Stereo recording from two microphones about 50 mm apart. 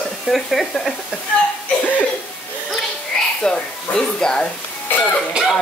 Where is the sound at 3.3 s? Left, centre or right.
Centre.